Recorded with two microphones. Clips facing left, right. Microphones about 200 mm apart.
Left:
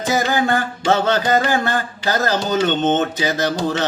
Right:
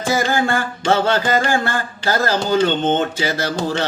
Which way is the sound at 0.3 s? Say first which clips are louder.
Left 1 dB; 20° left (ahead or behind).